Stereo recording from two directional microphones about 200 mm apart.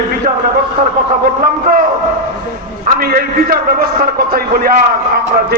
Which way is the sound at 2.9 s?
45° right (ahead or behind).